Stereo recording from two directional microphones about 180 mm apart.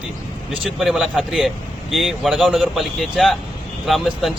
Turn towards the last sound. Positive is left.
turn(degrees=0)  # may be behind; listen again after turning